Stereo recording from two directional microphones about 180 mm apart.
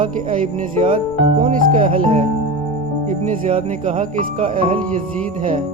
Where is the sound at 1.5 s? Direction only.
45° right (ahead or behind).